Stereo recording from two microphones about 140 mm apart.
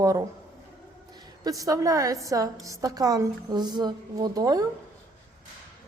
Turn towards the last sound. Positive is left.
turn(degrees=-25)  # may be behind; listen again after turning